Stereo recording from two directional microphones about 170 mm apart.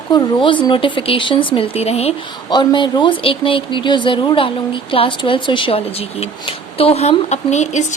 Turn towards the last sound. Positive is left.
turn(degrees=45)  # may be behind; listen again after turning